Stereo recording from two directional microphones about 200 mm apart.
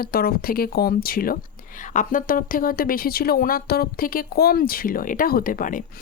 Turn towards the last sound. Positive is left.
turn(degrees=40)  # may be behind; listen again after turning